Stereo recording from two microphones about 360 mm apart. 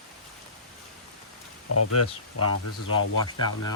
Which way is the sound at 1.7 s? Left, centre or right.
Left.